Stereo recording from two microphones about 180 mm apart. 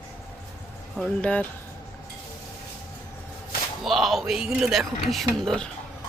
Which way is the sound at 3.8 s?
Centre (ahead or behind).